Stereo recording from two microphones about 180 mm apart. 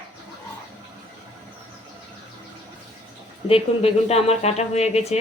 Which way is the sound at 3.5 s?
35° left (ahead or behind).